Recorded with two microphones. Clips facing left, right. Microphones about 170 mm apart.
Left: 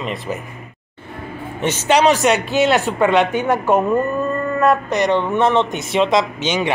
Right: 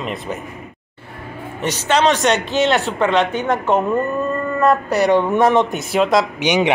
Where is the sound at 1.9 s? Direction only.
15° left (ahead or behind).